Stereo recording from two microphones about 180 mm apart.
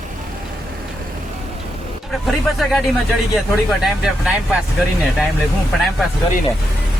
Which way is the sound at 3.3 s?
Centre (ahead or behind).